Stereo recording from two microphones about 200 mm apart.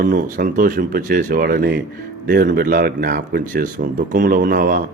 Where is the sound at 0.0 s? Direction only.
45° right (ahead or behind).